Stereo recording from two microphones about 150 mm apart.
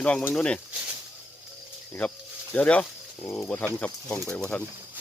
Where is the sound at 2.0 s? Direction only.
10° left (ahead or behind).